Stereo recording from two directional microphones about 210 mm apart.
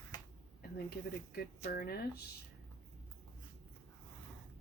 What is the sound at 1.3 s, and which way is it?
Speech, 45° left (ahead or behind).